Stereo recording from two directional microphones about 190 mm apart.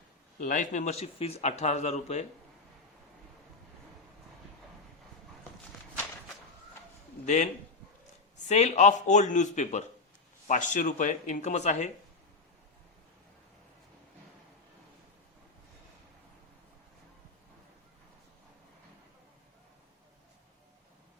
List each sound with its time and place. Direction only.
0.3 s a man's voice: 45° left (ahead or behind)
7.3 s a man's voice: 35° left (ahead or behind)